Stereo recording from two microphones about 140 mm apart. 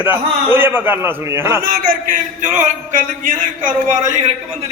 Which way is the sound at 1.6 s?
90° right.